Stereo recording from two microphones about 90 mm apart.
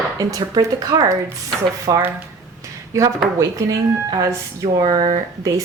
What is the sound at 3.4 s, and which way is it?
Speech, 40° right (ahead or behind).